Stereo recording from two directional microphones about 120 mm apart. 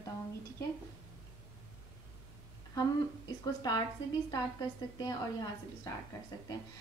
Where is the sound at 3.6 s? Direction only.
30° left (ahead or behind).